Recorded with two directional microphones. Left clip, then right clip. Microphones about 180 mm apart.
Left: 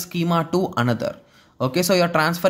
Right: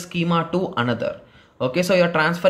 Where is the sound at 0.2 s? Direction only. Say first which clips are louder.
Even; 45° left (ahead or behind).